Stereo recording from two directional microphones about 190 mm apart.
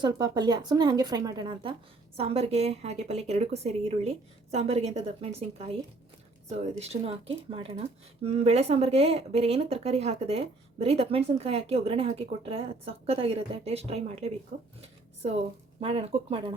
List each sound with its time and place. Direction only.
0.0 s a woman's voice: 20° right (ahead or behind)
14.8 s a sound: 35° right (ahead or behind)
15.8 s speech: 30° right (ahead or behind)